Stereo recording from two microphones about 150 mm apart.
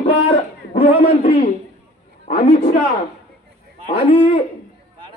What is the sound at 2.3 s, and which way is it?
Speech, 75° left (ahead or behind).